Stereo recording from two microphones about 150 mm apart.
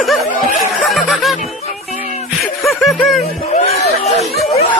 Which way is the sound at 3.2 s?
45° left (ahead or behind).